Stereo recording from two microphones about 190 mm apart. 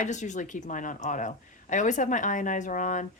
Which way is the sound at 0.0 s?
40° left (ahead or behind).